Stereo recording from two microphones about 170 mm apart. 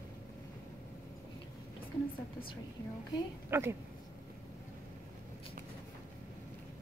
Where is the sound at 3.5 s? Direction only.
15° right (ahead or behind).